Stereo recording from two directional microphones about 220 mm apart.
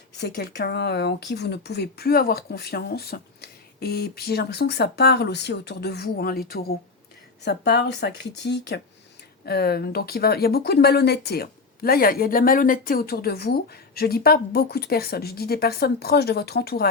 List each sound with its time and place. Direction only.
0.2 s speech: 50° left (ahead or behind)